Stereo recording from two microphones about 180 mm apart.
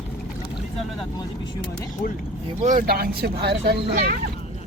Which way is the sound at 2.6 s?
45° right (ahead or behind).